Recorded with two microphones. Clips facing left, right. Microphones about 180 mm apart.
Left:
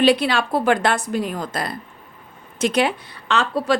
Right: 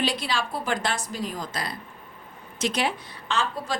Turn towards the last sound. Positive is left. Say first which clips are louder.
# left 7 dB
turn(degrees=70)  # may be behind; listen again after turning